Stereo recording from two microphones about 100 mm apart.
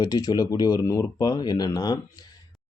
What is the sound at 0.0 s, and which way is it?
Speech, 40° left (ahead or behind).